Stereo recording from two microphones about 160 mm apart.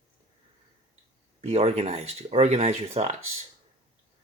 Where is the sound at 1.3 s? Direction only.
40° right (ahead or behind).